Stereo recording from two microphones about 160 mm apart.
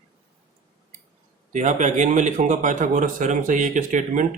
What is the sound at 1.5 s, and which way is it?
A man's voice, 45° right (ahead or behind).